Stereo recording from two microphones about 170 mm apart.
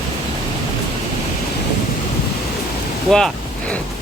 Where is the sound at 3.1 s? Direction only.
Centre (ahead or behind).